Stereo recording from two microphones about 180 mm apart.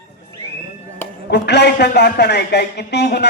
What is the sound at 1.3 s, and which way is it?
A man's voice, 70° left (ahead or behind).